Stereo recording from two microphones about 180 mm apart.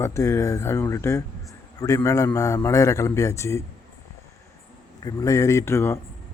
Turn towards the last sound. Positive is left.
turn(degrees=15)  # may be behind; listen again after turning